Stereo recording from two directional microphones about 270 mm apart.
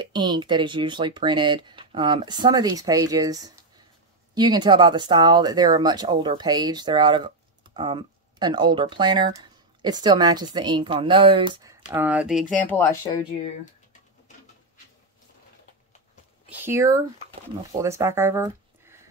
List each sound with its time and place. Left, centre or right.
0.0 s speech: centre
16.4 s speech: centre